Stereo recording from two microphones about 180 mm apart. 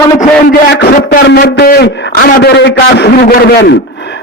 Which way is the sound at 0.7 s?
60° left (ahead or behind).